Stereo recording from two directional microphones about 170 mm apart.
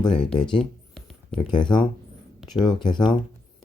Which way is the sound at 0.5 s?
Centre (ahead or behind).